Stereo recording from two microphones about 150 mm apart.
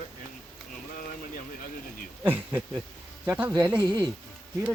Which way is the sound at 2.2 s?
15° right (ahead or behind).